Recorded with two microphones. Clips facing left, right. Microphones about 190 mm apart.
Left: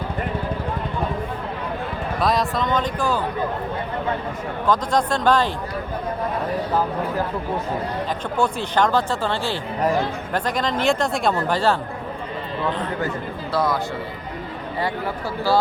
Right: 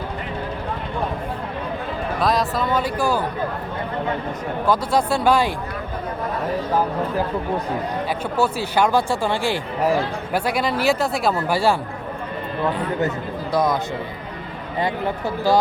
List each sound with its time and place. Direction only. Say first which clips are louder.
2.2 s speech: even; centre (ahead or behind)
4.6 s speech: even; 10° right (ahead or behind)
8.4 s speech: right 1 dB; 5° right (ahead or behind)
13.5 s speech: right 2 dB; 15° right (ahead or behind)
14.8 s speech: right 3 dB; 20° right (ahead or behind)